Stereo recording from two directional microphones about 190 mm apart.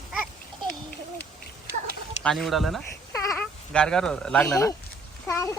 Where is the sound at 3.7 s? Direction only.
5° left (ahead or behind).